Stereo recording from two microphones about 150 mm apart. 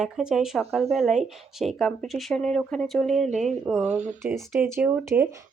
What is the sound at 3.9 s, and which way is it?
Speech, 50° right (ahead or behind).